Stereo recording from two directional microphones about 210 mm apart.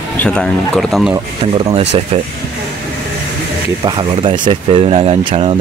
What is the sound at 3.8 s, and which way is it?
Speech, 25° right (ahead or behind).